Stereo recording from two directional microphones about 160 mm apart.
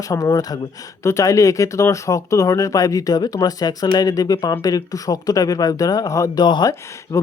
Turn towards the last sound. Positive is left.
turn(degrees=15)  # may be behind; listen again after turning